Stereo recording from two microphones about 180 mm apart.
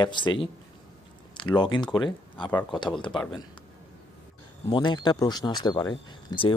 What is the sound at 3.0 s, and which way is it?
Speech, 25° left (ahead or behind).